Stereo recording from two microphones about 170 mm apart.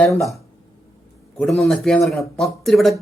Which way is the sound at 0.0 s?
Centre (ahead or behind).